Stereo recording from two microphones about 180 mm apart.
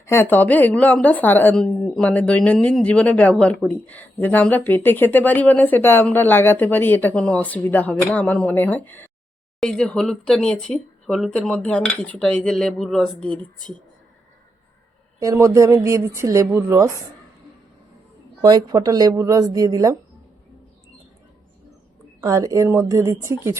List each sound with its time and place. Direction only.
0.0 s speech: 15° left (ahead or behind)
15.2 s speech: 15° right (ahead or behind)
18.4 s speech: 20° right (ahead or behind)
22.2 s speech: 20° right (ahead or behind)